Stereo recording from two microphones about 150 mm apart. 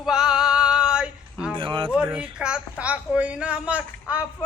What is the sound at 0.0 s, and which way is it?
Male singing, 5° right (ahead or behind).